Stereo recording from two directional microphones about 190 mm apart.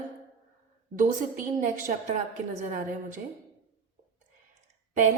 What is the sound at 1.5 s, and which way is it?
A woman's voice, 40° right (ahead or behind).